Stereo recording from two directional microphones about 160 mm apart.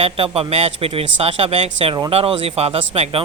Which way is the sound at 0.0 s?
35° right (ahead or behind).